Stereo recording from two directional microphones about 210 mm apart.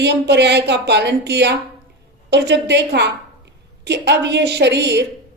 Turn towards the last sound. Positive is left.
turn(degrees=-55)  # may be behind; listen again after turning